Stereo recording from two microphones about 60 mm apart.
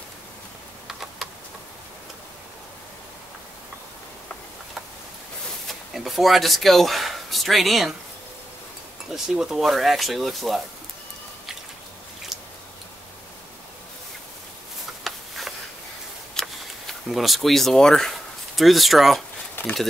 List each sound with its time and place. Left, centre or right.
0.8 s computer keyboard: centre
5.7 s speech: centre
9.1 s speech: centre
15.0 s a sound: centre
17.1 s speech: centre
18.6 s speech: centre
19.6 s a sound: left